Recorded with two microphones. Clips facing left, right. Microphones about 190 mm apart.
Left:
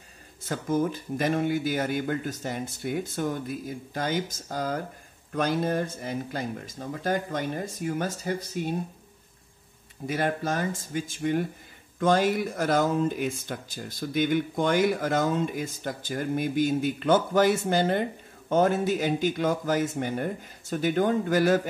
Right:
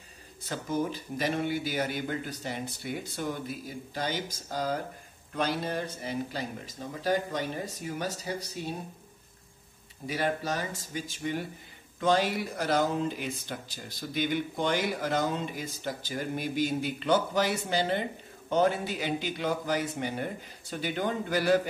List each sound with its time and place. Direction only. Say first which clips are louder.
0.5 s speech: left 4 dB; 50° left (ahead or behind)
10.0 s speech: left 3 dB; 50° left (ahead or behind)